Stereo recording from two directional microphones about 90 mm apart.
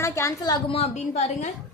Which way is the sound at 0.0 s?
35° left (ahead or behind).